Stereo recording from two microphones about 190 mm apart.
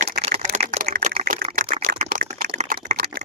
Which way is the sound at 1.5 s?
50° right (ahead or behind).